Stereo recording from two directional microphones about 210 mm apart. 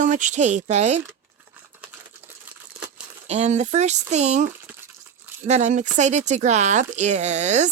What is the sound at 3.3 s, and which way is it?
Speech, 30° right (ahead or behind).